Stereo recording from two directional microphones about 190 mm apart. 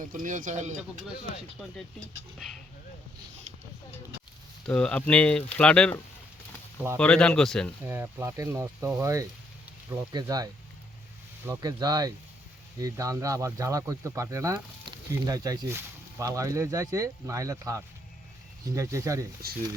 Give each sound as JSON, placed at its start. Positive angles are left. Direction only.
{"t": 0.0, "sound": "speech", "side_deg": -45}
{"t": 4.6, "sound": "speech", "side_deg": 5}
{"t": 7.9, "sound": "speech", "side_deg": -10}